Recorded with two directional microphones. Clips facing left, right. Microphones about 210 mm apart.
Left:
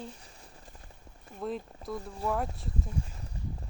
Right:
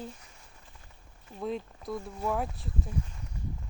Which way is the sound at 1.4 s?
Centre (ahead or behind).